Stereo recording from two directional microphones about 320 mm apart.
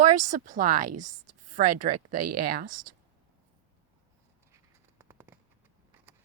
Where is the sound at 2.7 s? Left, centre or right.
Right.